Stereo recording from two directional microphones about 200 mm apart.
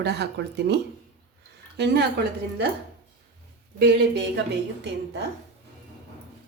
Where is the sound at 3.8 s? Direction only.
55° right (ahead or behind).